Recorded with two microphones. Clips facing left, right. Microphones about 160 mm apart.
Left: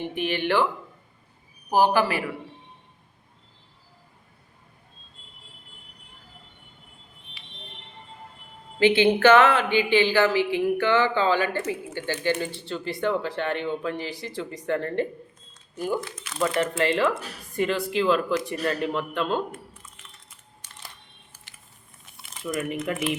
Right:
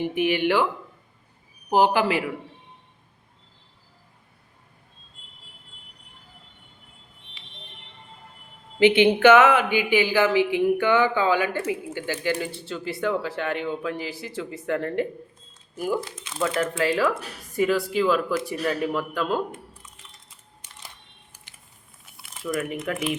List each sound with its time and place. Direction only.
0.0 s speech: 10° right (ahead or behind)
1.7 s speech: 15° right (ahead or behind)
8.8 s speech: 15° right (ahead or behind)
16.0 s speech: 25° right (ahead or behind)
16.6 s speech: centre (ahead or behind)
22.2 s speech: centre (ahead or behind)